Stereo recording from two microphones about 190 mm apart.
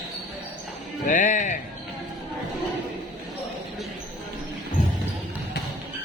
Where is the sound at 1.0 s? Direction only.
40° left (ahead or behind).